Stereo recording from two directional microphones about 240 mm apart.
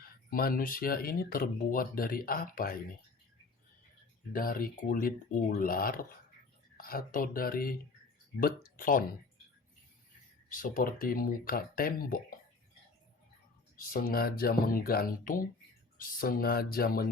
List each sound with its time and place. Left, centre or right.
0.0 s speech: left
4.3 s speech: left
10.5 s speech: left
13.7 s speech: left